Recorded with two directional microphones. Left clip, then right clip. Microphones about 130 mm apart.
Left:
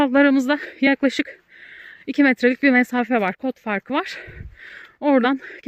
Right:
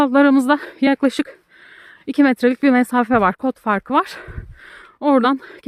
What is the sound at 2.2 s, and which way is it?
Speech, 30° right (ahead or behind).